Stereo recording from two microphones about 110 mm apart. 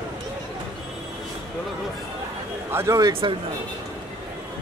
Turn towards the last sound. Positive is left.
turn(degrees=-55)  # may be behind; listen again after turning